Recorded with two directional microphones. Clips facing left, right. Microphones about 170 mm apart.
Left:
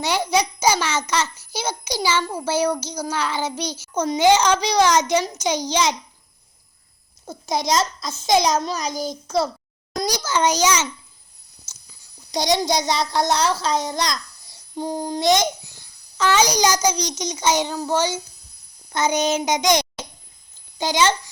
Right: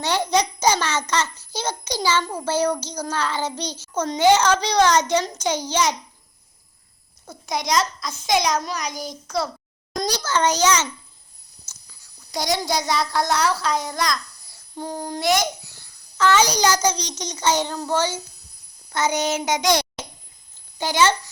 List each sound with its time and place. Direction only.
0.0 s a child's voice: 10° left (ahead or behind)
7.3 s a child's voice: 25° left (ahead or behind)
8.9 s a child's voice: centre (ahead or behind)
9.2 s a child's voice: 25° left (ahead or behind)
9.9 s a child's voice: 10° left (ahead or behind)
12.4 s a child's voice: 20° left (ahead or behind)